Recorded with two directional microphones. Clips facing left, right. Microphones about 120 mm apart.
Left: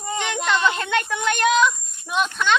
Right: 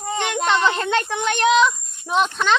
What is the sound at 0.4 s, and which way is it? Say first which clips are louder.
Speech: right 2 dB; 30° right (ahead or behind).